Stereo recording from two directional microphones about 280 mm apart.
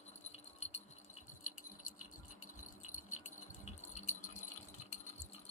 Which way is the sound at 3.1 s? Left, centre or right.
Left.